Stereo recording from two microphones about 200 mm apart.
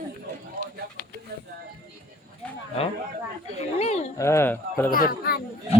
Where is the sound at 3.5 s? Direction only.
35° left (ahead or behind).